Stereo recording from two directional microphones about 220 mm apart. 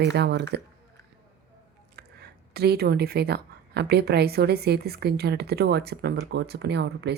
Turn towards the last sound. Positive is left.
turn(degrees=-50)  # may be behind; listen again after turning